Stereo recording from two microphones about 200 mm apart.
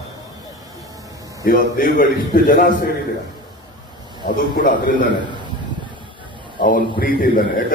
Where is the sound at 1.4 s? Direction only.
45° left (ahead or behind).